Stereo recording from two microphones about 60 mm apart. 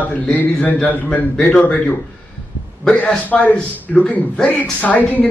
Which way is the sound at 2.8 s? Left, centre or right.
Left.